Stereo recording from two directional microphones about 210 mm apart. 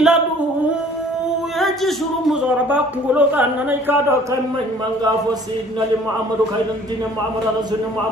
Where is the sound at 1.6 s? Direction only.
Centre (ahead or behind).